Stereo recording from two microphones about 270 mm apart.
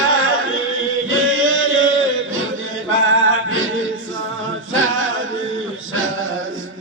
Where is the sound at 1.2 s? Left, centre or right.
Right.